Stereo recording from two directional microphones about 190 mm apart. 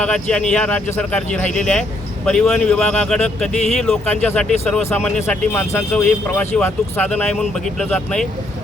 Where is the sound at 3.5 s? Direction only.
35° left (ahead or behind).